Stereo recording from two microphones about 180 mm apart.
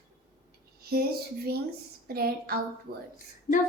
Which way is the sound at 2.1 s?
60° right (ahead or behind).